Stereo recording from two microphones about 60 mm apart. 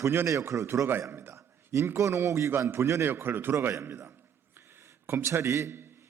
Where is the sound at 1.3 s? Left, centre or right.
Right.